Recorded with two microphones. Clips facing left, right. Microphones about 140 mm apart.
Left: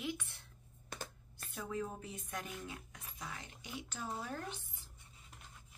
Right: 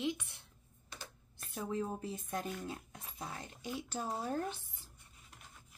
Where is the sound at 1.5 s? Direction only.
30° right (ahead or behind).